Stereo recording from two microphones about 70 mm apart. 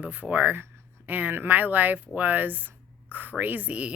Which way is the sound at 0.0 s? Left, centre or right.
Right.